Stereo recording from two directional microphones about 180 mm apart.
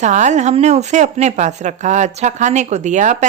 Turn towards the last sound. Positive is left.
turn(degrees=-40)  # may be behind; listen again after turning